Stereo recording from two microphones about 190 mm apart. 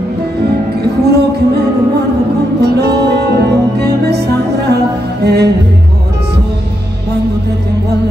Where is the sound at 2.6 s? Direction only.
60° right (ahead or behind).